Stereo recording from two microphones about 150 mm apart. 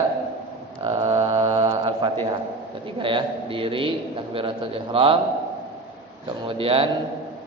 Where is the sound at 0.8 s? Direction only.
40° right (ahead or behind).